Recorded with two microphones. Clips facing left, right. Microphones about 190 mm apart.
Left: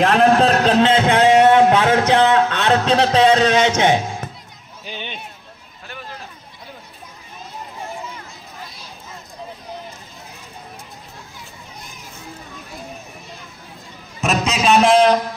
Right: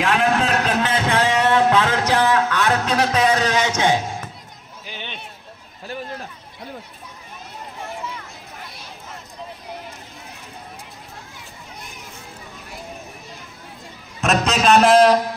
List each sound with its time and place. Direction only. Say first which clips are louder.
0.0 s a man's voice: left 6 dB; 40° left (ahead or behind); by 1.3 s 20° left (ahead or behind)
1.5 s music: left 4 dB; 20° left (ahead or behind)
4.8 s run: left 4 dB; 20° left (ahead or behind)
14.2 s a sound: right 1 dB; centre (ahead or behind)